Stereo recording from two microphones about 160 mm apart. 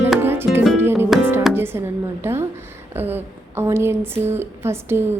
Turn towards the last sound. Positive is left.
turn(degrees=-15)  # may be behind; listen again after turning